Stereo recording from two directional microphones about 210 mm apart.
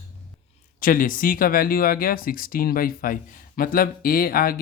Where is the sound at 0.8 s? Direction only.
40° left (ahead or behind).